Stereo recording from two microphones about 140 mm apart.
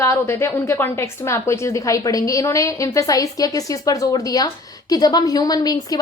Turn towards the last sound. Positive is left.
turn(degrees=25)  # may be behind; listen again after turning